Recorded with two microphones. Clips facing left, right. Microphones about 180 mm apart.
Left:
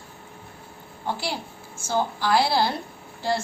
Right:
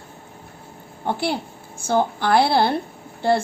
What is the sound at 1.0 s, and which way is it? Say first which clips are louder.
Speech: right 6 dB; 60° right (ahead or behind).